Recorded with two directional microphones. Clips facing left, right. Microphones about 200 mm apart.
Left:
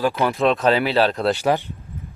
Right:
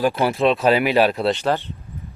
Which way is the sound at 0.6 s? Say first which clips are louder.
Right 3 dB; 15° right (ahead or behind).